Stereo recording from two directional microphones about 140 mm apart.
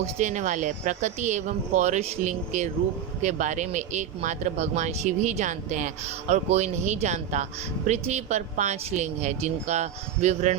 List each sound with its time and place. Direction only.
0.0 s speech: 55° right (ahead or behind)